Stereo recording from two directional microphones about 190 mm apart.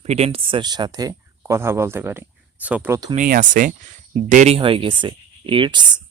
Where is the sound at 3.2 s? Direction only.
45° right (ahead or behind).